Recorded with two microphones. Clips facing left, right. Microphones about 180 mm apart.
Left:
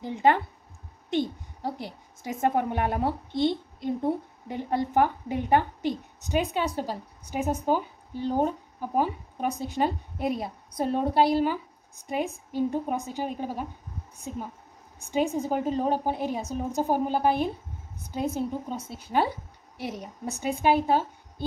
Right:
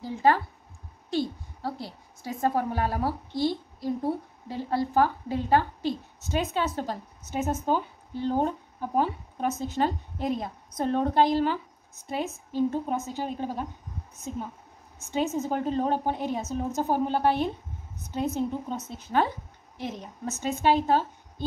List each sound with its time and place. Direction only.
0.0 s a woman's voice: 20° left (ahead or behind)
15.0 s a woman's voice: 15° left (ahead or behind)